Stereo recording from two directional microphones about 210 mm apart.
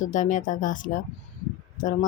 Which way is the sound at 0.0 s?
35° left (ahead or behind).